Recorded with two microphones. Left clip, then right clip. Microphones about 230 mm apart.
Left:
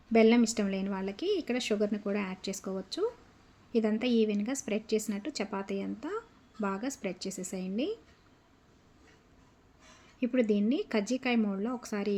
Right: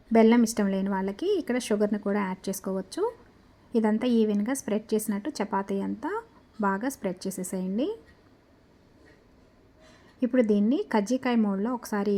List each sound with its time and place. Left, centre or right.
0.1 s a woman's voice: centre
10.5 s a woman's voice: centre